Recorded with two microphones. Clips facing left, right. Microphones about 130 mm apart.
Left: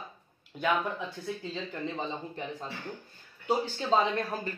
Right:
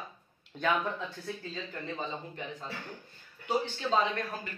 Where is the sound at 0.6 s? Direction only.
15° left (ahead or behind).